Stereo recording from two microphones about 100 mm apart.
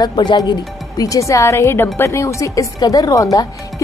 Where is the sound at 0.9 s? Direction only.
35° left (ahead or behind).